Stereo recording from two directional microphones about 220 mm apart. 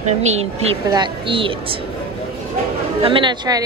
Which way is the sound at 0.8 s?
20° right (ahead or behind).